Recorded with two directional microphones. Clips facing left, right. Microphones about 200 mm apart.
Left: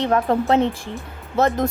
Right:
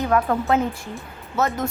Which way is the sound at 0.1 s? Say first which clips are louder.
Left 1 dB; 30° left (ahead or behind).